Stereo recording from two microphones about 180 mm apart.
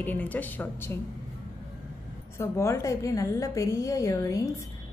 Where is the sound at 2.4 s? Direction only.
15° left (ahead or behind).